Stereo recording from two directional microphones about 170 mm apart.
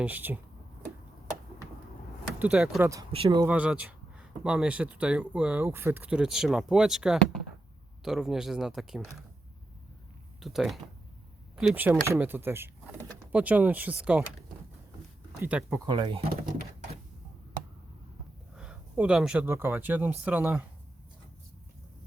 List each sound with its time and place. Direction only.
0.0 s speech: 10° right (ahead or behind)
2.4 s speech: 5° right (ahead or behind)
2.8 s speech: 20° right (ahead or behind)
3.1 s speech: 30° right (ahead or behind)
3.4 s speech: 10° right (ahead or behind)
10.4 s speech: centre (ahead or behind)
15.4 s speech: 10° right (ahead or behind)
15.9 s speech: 30° right (ahead or behind)
18.5 s speech: 5° right (ahead or behind)